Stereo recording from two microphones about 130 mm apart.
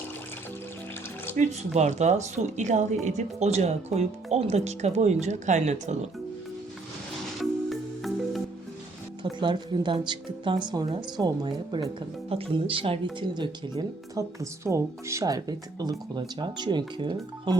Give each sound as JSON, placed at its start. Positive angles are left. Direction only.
{"t": 1.4, "sound": "a woman's voice", "side_deg": -60}
{"t": 7.3, "sound": "music", "side_deg": 0}
{"t": 9.4, "sound": "a woman's voice", "side_deg": -35}